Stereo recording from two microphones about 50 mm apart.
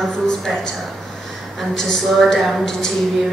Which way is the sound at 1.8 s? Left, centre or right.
Centre.